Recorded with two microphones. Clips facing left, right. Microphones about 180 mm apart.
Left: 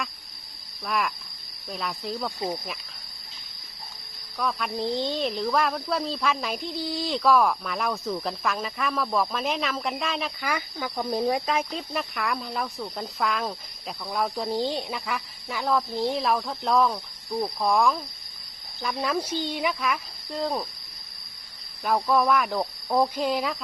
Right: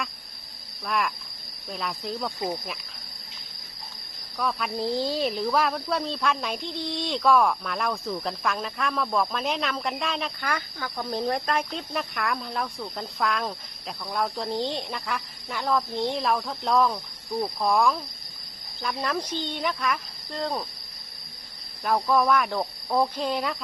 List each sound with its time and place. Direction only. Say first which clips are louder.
0.9 s speech: even; centre (ahead or behind)
4.4 s speech: even; centre (ahead or behind)
21.8 s speech: even; centre (ahead or behind)